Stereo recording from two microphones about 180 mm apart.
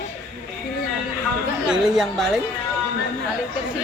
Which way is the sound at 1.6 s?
5° right (ahead or behind).